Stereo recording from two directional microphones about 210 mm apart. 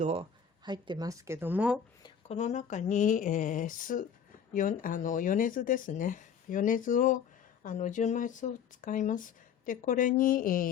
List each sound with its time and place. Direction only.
0.0 s a woman's voice: 30° right (ahead or behind); by 1.8 s 5° right (ahead or behind)
2.0 s speech: 30° left (ahead or behind)